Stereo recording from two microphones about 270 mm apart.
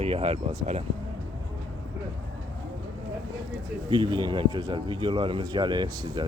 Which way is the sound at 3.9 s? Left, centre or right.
Centre.